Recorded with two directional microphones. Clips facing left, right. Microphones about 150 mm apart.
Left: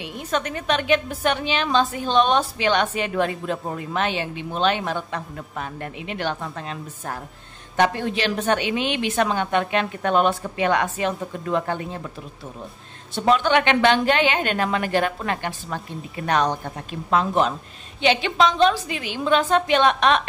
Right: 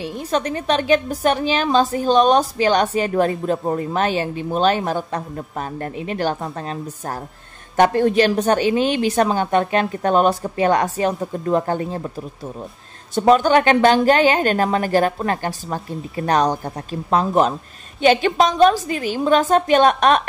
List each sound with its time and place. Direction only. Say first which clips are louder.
0.0 s a woman's voice: right 4 dB; 35° right (ahead or behind)
13.1 s a woman's voice: right 5 dB; 45° right (ahead or behind)